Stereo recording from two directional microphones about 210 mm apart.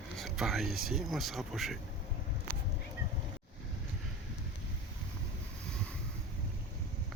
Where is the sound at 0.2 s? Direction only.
Centre (ahead or behind).